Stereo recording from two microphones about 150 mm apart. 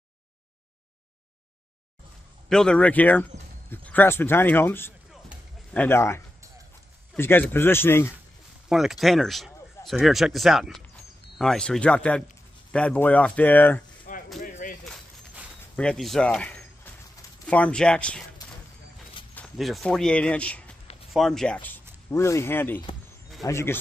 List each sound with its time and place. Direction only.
2.5 s speech: 5° left (ahead or behind)
8.6 s speech: centre (ahead or behind)
14.1 s a sound: 60° left (ahead or behind)
15.7 s speech: 5° left (ahead or behind)
19.3 s speech: centre (ahead or behind)